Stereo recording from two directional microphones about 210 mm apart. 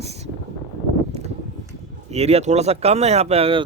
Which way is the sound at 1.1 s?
30° right (ahead or behind).